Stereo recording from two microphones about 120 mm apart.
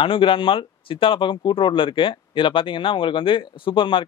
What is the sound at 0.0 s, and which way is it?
Speech, 45° left (ahead or behind).